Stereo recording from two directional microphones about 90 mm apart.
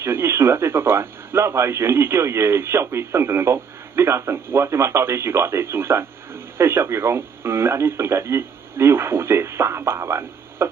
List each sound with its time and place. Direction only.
0.0 s speech: 30° right (ahead or behind)